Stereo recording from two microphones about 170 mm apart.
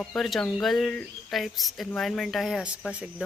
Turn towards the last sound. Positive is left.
turn(degrees=-5)  # may be behind; listen again after turning